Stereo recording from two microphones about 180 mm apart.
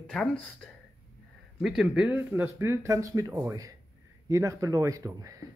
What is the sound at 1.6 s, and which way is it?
Speech, 5° right (ahead or behind).